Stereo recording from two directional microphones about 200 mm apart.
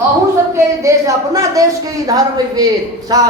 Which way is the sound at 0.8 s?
15° right (ahead or behind).